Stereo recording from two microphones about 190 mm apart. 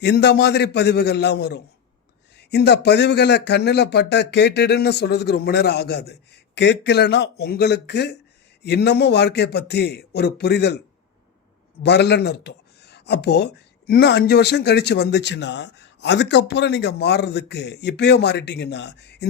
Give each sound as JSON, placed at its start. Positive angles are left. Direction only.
{"t": 0.0, "sound": "speech", "side_deg": 65}
{"t": 11.8, "sound": "speech", "side_deg": 60}